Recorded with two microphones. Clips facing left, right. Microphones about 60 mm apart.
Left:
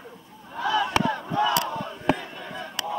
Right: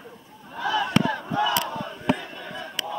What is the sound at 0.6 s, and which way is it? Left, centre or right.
Chop, left.